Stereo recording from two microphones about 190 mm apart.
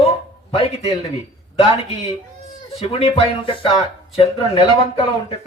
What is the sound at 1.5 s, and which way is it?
Speech, 30° left (ahead or behind).